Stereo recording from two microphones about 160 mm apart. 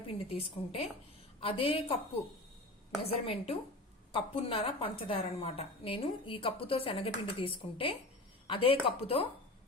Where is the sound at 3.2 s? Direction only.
35° left (ahead or behind).